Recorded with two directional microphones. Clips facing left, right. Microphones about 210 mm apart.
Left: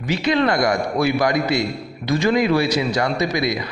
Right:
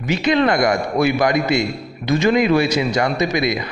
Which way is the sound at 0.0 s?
20° right (ahead or behind).